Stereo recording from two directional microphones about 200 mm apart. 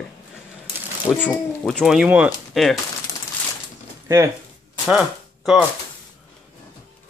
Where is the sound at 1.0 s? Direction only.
10° left (ahead or behind).